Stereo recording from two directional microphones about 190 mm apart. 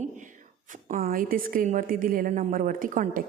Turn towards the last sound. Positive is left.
turn(degrees=-45)  # may be behind; listen again after turning